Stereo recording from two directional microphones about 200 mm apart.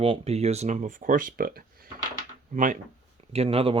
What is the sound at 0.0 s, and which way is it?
Speech, 30° right (ahead or behind).